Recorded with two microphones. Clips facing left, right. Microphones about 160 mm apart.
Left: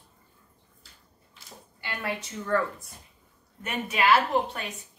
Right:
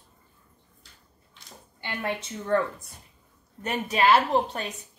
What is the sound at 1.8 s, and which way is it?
Speech, 25° right (ahead or behind).